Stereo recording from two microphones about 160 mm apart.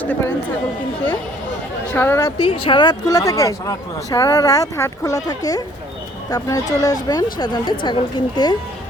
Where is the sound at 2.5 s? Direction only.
30° left (ahead or behind).